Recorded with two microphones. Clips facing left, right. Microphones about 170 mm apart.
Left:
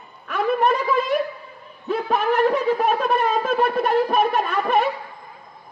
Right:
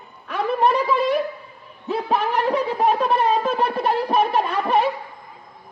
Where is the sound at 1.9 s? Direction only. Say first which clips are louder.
Left 1 dB; 30° right (ahead or behind).